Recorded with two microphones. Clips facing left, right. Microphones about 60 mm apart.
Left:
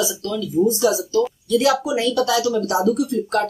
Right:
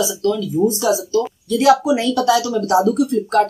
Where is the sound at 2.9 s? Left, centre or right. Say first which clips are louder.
Right 3 dB; right.